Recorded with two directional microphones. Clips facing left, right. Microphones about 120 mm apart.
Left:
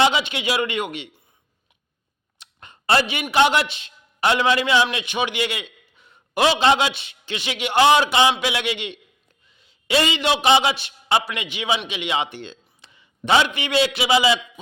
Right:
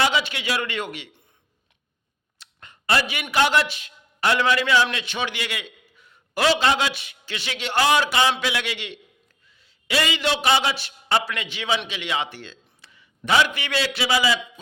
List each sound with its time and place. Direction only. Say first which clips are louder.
0.0 s a man's voice: left 3 dB; 20° left (ahead or behind)
2.4 s a sound: left 2 dB; 25° left (ahead or behind)
3.3 s a man's voice: left 2 dB; 20° left (ahead or behind)